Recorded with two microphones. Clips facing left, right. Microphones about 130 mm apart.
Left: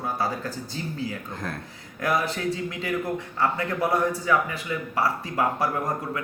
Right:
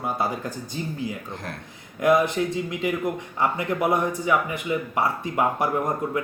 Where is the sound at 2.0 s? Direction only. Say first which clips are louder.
Right 5 dB; 20° right (ahead or behind).